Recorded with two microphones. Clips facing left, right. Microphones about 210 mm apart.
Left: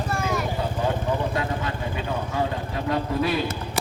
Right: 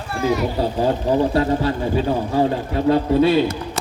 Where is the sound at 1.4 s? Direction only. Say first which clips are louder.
Right 9 dB; 35° right (ahead or behind).